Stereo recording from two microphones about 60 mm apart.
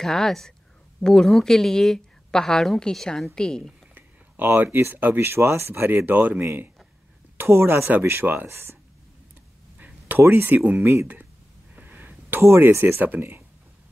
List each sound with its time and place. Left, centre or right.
0.0 s a woman's voice: centre
4.6 s speech: right
7.3 s speech: right
9.8 s a sound: right
10.1 s speech: right
10.8 s speech: right
11.7 s a sound: right
12.4 s speech: right